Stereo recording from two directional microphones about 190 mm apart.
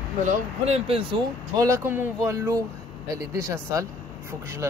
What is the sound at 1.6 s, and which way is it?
Speech, 15° right (ahead or behind).